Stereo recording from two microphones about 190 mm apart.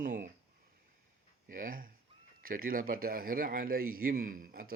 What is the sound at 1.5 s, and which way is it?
Speech, 45° right (ahead or behind).